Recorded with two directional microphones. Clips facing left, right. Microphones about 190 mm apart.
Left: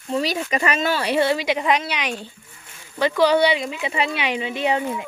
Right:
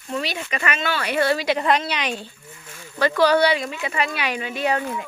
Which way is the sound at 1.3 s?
15° left (ahead or behind).